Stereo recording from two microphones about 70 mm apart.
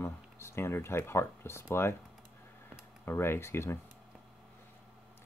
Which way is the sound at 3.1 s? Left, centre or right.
Left.